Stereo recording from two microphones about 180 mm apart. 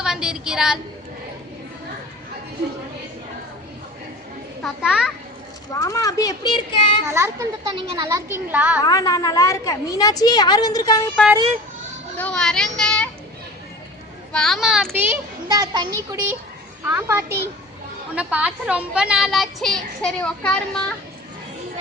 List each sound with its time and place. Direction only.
0.0 s a sound: 5° right (ahead or behind)
4.6 s a child's voice: centre (ahead or behind)
5.7 s a woman's voice: 20° left (ahead or behind)
7.1 s a child's voice: 15° right (ahead or behind)
7.7 s a child's voice: 30° right (ahead or behind); by 8.8 s 10° right (ahead or behind)
8.8 s a woman's voice: 20° left (ahead or behind)
12.1 s a child's voice: 10° left (ahead or behind)
14.3 s a child's voice: centre (ahead or behind)
14.9 s a child's voice: 10° right (ahead or behind); by 20.8 s 5° left (ahead or behind)